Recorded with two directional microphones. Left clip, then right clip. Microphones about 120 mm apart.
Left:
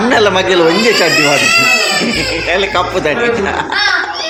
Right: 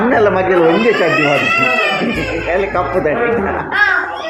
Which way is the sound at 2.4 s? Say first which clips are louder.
Left 2 dB; 15° left (ahead or behind).